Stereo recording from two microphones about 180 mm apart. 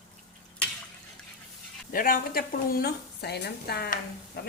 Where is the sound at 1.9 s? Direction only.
50° left (ahead or behind).